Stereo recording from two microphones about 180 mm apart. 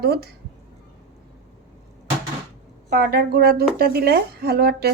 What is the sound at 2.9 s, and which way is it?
Speech, 60° right (ahead or behind).